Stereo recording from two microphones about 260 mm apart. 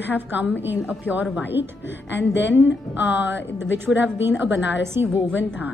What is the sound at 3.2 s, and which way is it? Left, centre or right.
Speech, left.